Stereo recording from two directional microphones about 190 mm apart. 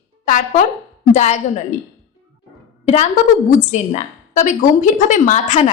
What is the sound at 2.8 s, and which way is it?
A woman's voice, 35° left (ahead or behind).